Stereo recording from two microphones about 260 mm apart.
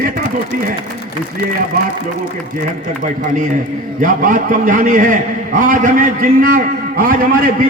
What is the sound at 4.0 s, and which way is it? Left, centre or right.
A man's voice, right.